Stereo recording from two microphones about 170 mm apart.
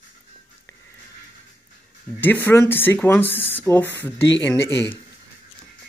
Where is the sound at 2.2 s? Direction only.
10° left (ahead or behind).